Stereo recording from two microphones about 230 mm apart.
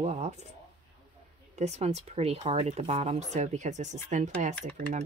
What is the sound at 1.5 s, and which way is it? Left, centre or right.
Speech, right.